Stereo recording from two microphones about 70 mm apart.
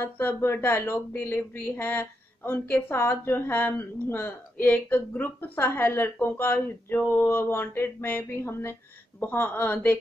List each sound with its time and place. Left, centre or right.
0.0 s a woman's voice: left